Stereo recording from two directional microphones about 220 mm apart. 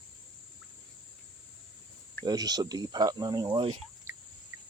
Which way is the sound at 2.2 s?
20° right (ahead or behind).